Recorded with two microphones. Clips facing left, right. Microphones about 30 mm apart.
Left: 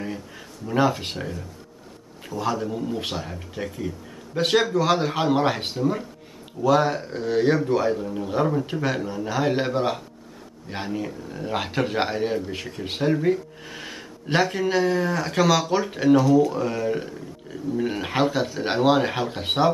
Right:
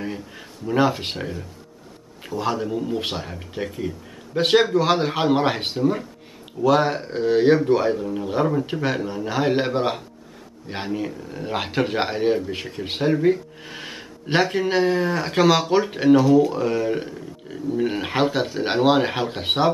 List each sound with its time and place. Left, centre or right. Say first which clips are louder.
0.0 s speech: right 2 dB; centre
2.7 s speech: right 3 dB; centre
3.0 s speech: right 2 dB; right